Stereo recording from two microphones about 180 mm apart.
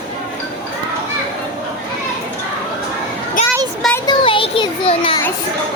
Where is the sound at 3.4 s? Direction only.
45° left (ahead or behind).